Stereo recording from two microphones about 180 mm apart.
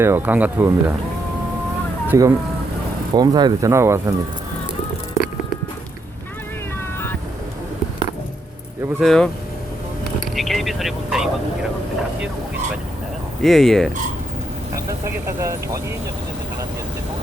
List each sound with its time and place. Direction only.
0.0 s speech: 10° right (ahead or behind)
2.0 s speech: 20° right (ahead or behind)
9.0 s frog: 5° left (ahead or behind)
10.2 s speech: centre (ahead or behind)
13.4 s frog: centre (ahead or behind)
15.0 s speech: 15° right (ahead or behind)